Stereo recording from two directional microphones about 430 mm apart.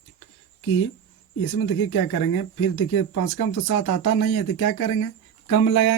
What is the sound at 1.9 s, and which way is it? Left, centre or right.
Speech, left.